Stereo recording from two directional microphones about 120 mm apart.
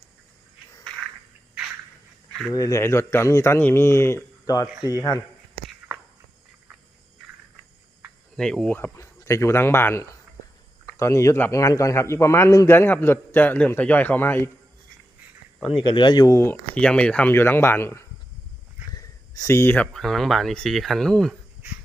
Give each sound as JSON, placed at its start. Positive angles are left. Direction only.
{"t": 2.5, "sound": "a man's voice", "side_deg": 30}
{"t": 8.4, "sound": "speech", "side_deg": 5}
{"t": 9.0, "sound": "a man's voice", "side_deg": 25}
{"t": 15.9, "sound": "speech", "side_deg": 40}
{"t": 16.7, "sound": "speech", "side_deg": 10}
{"t": 17.3, "sound": "a man's voice", "side_deg": 20}
{"t": 18.9, "sound": "snort", "side_deg": 30}
{"t": 19.9, "sound": "speech", "side_deg": 5}